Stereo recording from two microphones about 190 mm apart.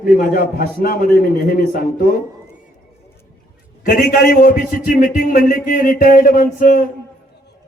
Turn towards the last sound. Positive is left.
turn(degrees=45)  # may be behind; listen again after turning